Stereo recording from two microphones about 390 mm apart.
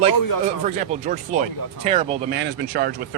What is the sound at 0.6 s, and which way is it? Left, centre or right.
Speech, centre.